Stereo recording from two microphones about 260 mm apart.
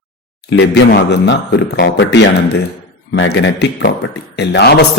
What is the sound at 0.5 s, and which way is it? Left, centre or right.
A man's voice, left.